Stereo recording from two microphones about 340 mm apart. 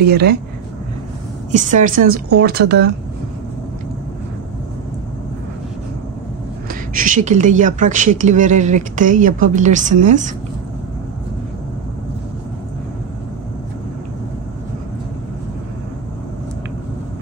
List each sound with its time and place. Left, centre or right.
0.0 s speech: right
1.5 s speech: right
6.7 s speech: right